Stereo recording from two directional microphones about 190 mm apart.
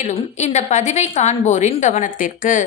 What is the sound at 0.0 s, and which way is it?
A woman's voice, 35° left (ahead or behind).